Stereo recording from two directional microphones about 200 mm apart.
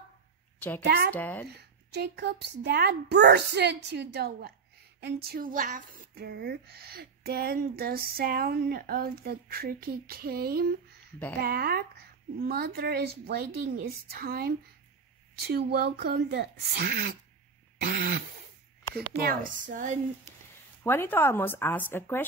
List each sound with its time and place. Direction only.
0.6 s a woman's voice: 10° left (ahead or behind)
0.8 s speech: 55° right (ahead or behind)
1.1 s speech: 10° left (ahead or behind)
1.5 s a woman's voice: 55° right (ahead or behind)
19.2 s speech: 40° right (ahead or behind)
20.8 s speech: 10° left (ahead or behind)